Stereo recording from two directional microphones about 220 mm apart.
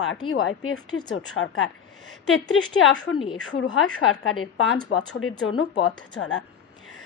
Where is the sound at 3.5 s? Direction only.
70° left (ahead or behind).